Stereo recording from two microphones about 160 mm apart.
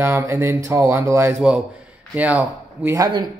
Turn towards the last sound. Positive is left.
turn(degrees=-25)  # may be behind; listen again after turning